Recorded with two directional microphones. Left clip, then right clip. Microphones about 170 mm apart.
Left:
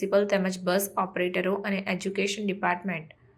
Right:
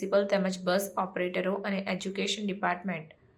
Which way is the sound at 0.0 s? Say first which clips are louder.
Left 2 dB; 15° left (ahead or behind).